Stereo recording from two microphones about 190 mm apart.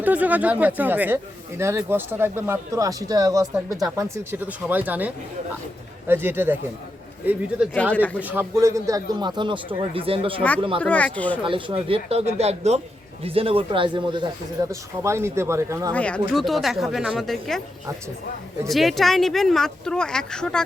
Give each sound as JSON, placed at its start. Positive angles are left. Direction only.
{"t": 0.0, "sound": "speech", "side_deg": -10}
{"t": 7.6, "sound": "speech", "side_deg": -5}
{"t": 10.8, "sound": "speech", "side_deg": 10}
{"t": 11.4, "sound": "speech", "side_deg": -25}
{"t": 14.6, "sound": "speech", "side_deg": -15}
{"t": 15.9, "sound": "speech", "side_deg": 5}
{"t": 18.7, "sound": "speech", "side_deg": 0}